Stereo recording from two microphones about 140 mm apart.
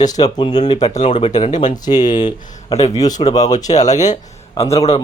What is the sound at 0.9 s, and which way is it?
Speech, 55° left (ahead or behind).